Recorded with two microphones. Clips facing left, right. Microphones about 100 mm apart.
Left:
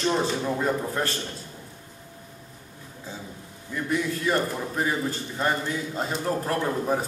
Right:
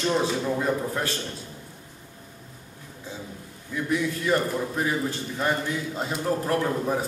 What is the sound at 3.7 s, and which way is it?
A man's voice, centre (ahead or behind).